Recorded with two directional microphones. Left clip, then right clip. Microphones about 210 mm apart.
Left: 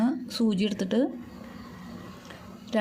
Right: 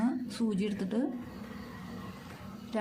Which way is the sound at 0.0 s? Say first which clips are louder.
Left 6 dB; 35° left (ahead or behind).